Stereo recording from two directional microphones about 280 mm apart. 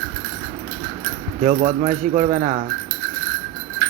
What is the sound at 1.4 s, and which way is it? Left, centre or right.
Speech, right.